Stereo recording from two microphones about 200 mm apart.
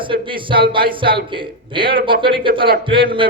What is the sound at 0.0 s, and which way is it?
Music, 25° right (ahead or behind).